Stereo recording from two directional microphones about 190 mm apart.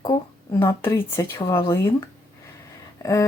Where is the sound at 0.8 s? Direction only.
10° left (ahead or behind).